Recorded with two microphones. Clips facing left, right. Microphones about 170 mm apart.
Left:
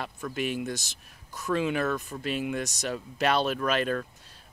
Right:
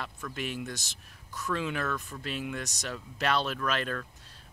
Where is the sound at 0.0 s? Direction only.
10° left (ahead or behind).